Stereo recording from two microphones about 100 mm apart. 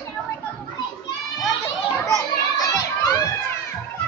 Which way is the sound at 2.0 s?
35° left (ahead or behind).